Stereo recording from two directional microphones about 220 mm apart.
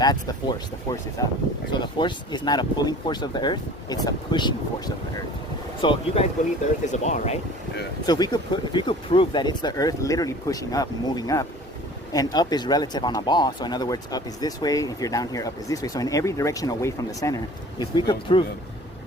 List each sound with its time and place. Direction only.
0.0 s speech: 20° left (ahead or behind)
5.8 s speech: 25° left (ahead or behind)
8.0 s speech: 20° left (ahead or behind)